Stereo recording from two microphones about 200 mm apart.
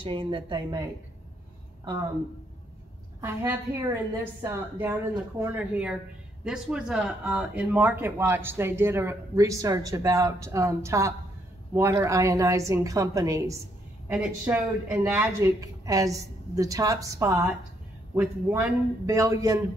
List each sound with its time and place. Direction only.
0.0 s speech: 25° right (ahead or behind)
3.2 s a woman's voice: 10° right (ahead or behind)